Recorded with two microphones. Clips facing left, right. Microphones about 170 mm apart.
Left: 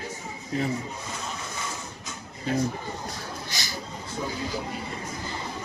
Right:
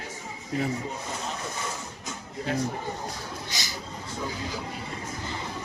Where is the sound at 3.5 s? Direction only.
20° right (ahead or behind).